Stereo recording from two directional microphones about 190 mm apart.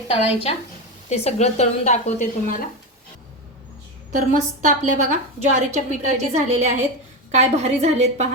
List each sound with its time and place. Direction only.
0.1 s a woman's voice: 30° left (ahead or behind)
4.6 s a woman's voice: 40° right (ahead or behind)